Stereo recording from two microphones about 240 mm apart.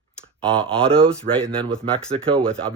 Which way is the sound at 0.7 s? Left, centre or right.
Right.